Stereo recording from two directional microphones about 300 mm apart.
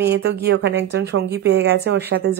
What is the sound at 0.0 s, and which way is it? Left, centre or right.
A woman's voice, right.